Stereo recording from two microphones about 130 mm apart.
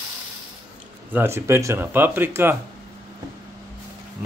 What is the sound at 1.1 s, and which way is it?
Speech, 20° right (ahead or behind).